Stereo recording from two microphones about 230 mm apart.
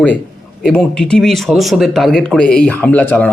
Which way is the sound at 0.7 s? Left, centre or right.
Centre.